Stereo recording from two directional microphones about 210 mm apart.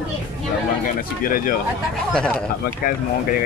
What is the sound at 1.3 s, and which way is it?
Speech, 40° left (ahead or behind).